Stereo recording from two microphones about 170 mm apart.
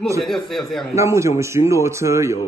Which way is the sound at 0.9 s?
15° right (ahead or behind).